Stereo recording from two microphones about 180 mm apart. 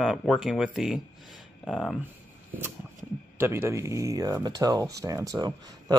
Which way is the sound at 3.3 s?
10° right (ahead or behind).